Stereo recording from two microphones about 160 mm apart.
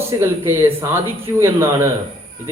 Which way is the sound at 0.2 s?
15° right (ahead or behind).